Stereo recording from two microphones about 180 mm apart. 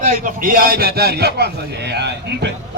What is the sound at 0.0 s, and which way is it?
A man's voice, 50° right (ahead or behind).